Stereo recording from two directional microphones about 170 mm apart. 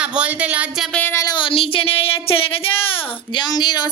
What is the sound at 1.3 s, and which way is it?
A woman's voice, 30° left (ahead or behind).